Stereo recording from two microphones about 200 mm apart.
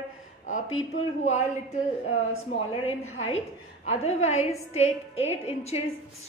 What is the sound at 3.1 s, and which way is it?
A woman's voice, 35° left (ahead or behind).